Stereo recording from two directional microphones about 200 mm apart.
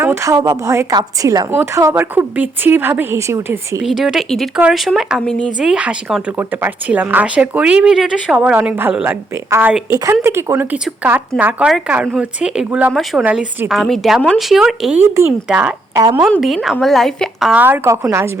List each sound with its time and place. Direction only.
0.0 s a woman's voice: 15° right (ahead or behind)
3.8 s speech: centre (ahead or behind)
16.0 s a woman's voice: 20° right (ahead or behind)
16.3 s a woman's voice: 5° left (ahead or behind); by 18.3 s 15° right (ahead or behind)